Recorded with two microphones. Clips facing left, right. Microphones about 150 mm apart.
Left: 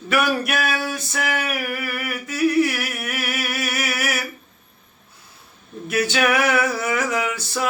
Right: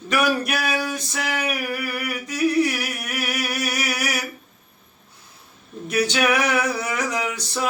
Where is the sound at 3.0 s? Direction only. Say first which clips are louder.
Even; centre (ahead or behind).